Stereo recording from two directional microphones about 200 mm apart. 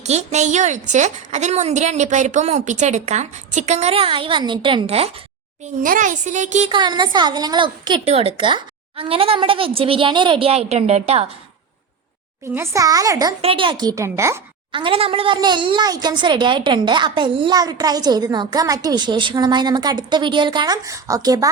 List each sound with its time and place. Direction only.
0.0 s a woman's voice: 35° right (ahead or behind)
5.6 s a woman's voice: 40° right (ahead or behind)
6.7 s speech: 25° right (ahead or behind)
12.5 s a child's voice: 15° right (ahead or behind)
14.7 s speech: 25° right (ahead or behind)